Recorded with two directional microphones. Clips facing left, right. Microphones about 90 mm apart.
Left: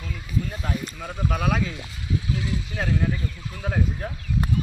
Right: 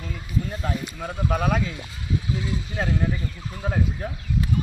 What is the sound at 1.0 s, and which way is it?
Speech, 30° right (ahead or behind).